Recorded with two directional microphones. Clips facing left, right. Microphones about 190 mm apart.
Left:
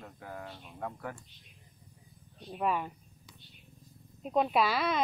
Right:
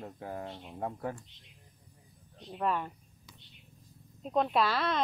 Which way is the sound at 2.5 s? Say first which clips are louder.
Even; 10° left (ahead or behind).